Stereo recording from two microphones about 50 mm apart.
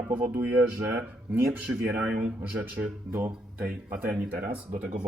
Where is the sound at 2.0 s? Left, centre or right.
Right.